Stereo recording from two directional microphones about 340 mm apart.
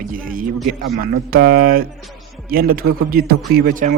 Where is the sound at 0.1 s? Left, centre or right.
Right.